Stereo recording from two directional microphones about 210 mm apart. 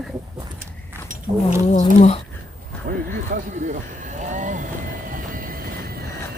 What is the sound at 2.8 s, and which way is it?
Vehicle, 40° right (ahead or behind).